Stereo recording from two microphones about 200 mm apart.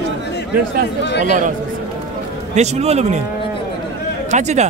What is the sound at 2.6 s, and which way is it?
Speech, 35° right (ahead or behind).